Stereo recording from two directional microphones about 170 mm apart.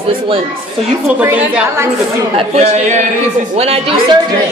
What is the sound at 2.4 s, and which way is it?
A woman's voice, 40° right (ahead or behind).